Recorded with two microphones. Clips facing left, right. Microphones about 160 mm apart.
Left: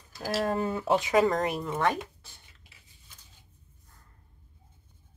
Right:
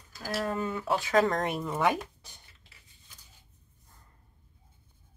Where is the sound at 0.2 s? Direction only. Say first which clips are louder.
Left 3 dB; 30° left (ahead or behind).